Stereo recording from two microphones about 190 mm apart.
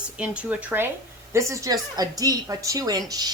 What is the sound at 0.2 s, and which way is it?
A woman's voice, 5° right (ahead or behind).